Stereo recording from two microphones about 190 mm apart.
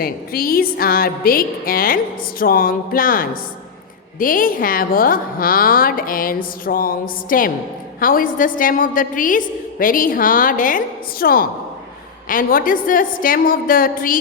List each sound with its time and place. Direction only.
0.0 s a woman's voice: 50° left (ahead or behind)